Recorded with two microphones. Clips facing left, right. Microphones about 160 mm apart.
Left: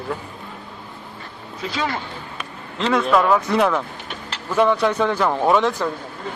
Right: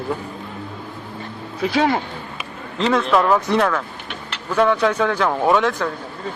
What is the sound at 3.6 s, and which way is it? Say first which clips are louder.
Speech: left 1 dB; 10° left (ahead or behind).